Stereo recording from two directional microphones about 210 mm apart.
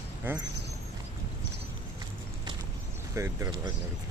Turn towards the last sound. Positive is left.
turn(degrees=-15)  # may be behind; listen again after turning